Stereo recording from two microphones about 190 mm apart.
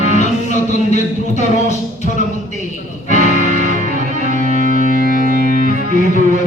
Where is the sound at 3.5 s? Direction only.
40° right (ahead or behind).